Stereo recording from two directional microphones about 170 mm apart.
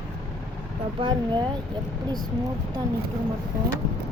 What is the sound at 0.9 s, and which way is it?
Speech, 30° right (ahead or behind).